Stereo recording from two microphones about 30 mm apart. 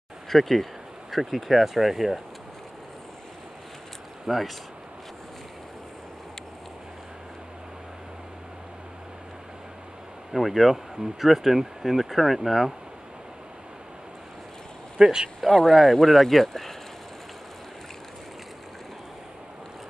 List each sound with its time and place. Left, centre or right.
0.3 s speech: centre
4.3 s speech: centre
10.3 s speech: centre
15.0 s speech: right
15.7 s speech: centre